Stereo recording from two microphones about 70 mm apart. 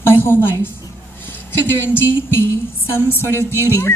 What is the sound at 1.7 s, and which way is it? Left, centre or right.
A woman's voice, left.